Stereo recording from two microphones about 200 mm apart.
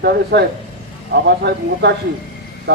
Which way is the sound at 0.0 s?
50° right (ahead or behind).